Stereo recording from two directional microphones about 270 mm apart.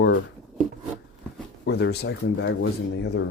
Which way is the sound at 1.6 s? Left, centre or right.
Left.